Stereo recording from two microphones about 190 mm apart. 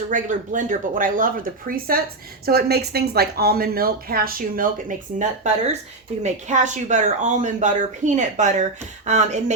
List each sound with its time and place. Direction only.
0.1 s speech: 45° right (ahead or behind)